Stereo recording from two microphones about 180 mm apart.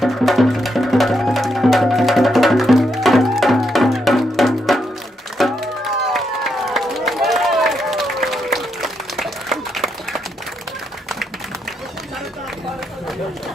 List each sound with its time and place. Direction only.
0.0 s music: centre (ahead or behind)
5.4 s a sound: centre (ahead or behind)
6.1 s run: centre (ahead or behind)